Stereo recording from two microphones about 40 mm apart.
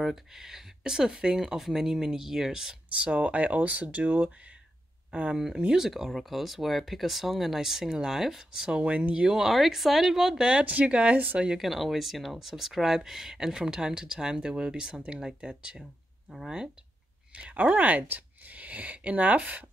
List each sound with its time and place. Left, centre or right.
0.0 s speech: centre
2.9 s speech: right
5.7 s speech: centre
8.7 s speech: right
9.3 s speech: centre
10.6 s speech: right
11.5 s speech: centre; by 15.8 s right
17.3 s speech: right